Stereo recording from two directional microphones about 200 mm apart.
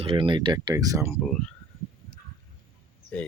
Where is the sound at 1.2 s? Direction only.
5° left (ahead or behind).